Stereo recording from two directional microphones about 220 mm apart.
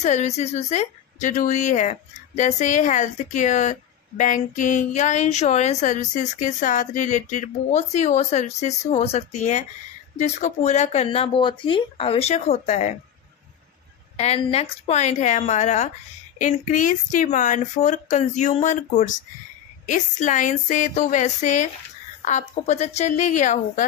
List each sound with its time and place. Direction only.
0.0 s speech: 30° left (ahead or behind)
14.1 s speech: 30° left (ahead or behind)
22.7 s speech: 30° left (ahead or behind)